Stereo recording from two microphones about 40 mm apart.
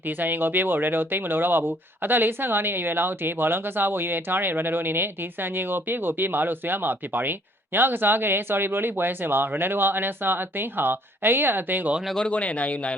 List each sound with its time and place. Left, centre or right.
0.2 s speech: right
12.3 s speech: left